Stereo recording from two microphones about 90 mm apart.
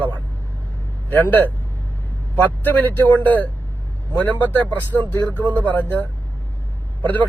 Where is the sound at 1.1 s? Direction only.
20° left (ahead or behind).